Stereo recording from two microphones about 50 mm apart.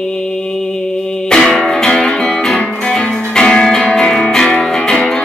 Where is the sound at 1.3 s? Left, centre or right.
Centre.